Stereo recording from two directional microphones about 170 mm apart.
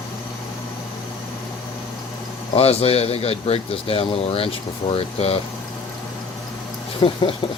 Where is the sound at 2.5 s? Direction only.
35° left (ahead or behind).